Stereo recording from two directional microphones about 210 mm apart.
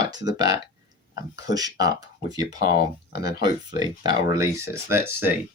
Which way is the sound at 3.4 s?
20° right (ahead or behind).